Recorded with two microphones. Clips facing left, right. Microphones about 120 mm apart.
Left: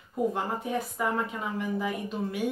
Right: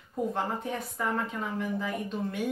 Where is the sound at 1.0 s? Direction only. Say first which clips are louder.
Left 1 dB; 10° left (ahead or behind).